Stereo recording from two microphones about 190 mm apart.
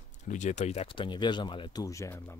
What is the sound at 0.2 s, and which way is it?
Speech, 40° left (ahead or behind).